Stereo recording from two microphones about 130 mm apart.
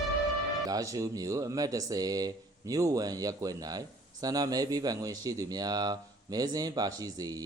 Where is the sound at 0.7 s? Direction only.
25° right (ahead or behind).